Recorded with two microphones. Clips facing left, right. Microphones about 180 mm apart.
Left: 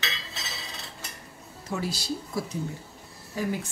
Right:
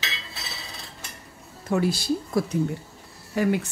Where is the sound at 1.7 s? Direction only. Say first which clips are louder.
Right 8 dB; 55° right (ahead or behind).